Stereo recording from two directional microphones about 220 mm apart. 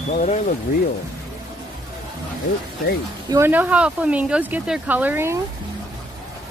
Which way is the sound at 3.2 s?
10° right (ahead or behind).